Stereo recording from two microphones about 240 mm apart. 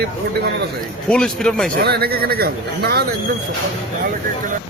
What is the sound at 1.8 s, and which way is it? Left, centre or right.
A man's voice, right.